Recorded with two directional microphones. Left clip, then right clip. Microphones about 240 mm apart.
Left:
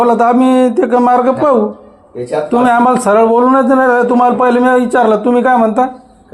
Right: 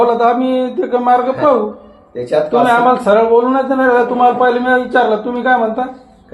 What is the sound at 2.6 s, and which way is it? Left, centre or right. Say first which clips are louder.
A man's voice: left 3 dB; left.